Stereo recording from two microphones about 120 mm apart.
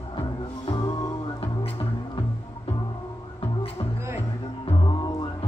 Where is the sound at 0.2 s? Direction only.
40° left (ahead or behind).